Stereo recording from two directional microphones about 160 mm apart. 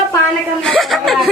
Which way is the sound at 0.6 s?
Centre (ahead or behind).